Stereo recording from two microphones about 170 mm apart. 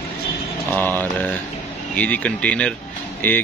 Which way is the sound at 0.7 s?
10° left (ahead or behind).